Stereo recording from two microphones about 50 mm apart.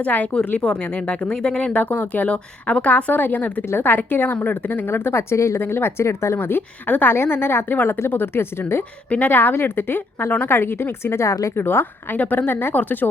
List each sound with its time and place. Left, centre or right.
0.0 s a woman's voice: left
0.6 s speech: left
1.8 s a woman's voice: left
5.5 s speech: left
6.4 s speech: left
6.8 s a woman's voice: left
7.1 s speech: left
9.0 s a woman's voice: left
11.5 s speech: left
12.2 s a woman's voice: left